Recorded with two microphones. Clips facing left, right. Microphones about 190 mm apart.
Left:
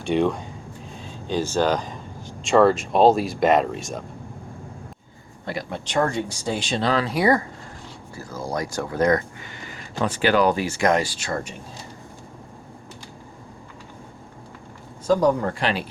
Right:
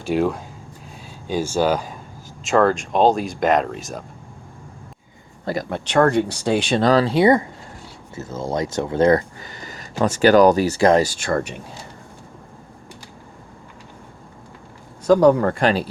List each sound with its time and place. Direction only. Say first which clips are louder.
0.0 s speech: right 1 dB; 5° right (ahead or behind)
5.6 s speech: right 6 dB; 65° right (ahead or behind)
6.8 s speech: right 5 dB; 35° right (ahead or behind); by 11.5 s 60° right (ahead or behind)
15.0 s speech: right 5 dB; 70° right (ahead or behind)
15.5 s speech: right 6 dB; 45° right (ahead or behind)